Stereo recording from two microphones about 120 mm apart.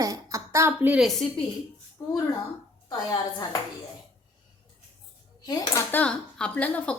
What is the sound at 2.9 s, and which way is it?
Speech, 30° left (ahead or behind).